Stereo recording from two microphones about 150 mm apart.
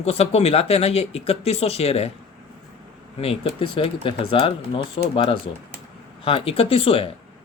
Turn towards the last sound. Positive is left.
turn(degrees=40)  # may be behind; listen again after turning